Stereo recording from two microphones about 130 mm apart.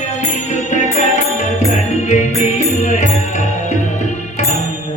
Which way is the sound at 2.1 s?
65° left (ahead or behind).